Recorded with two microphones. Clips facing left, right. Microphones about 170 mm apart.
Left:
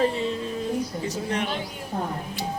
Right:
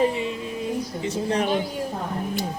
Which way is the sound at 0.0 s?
15° right (ahead or behind).